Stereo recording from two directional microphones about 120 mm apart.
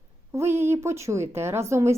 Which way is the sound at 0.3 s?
20° right (ahead or behind).